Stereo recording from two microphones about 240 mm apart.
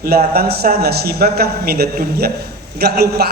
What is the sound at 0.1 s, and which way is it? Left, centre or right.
A man's voice, right.